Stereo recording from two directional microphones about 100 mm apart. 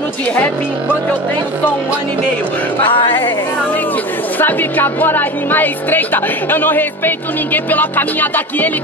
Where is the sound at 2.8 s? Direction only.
55° left (ahead or behind).